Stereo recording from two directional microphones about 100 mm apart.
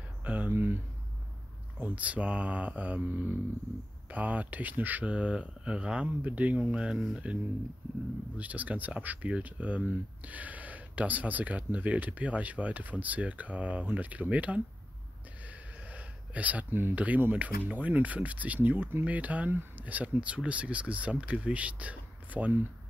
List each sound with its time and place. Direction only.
0.2 s speech: 15° right (ahead or behind)
1.8 s speech: 15° right (ahead or behind)
8.4 s speech: 15° right (ahead or behind)